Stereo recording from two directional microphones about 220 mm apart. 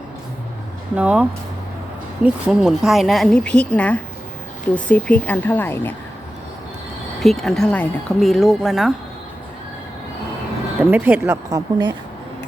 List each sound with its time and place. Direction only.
0.9 s a woman's voice: 5° right (ahead or behind)
7.2 s a woman's voice: centre (ahead or behind)
10.8 s speech: 10° right (ahead or behind)